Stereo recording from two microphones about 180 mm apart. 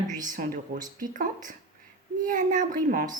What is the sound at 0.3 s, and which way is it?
Speech, 45° right (ahead or behind).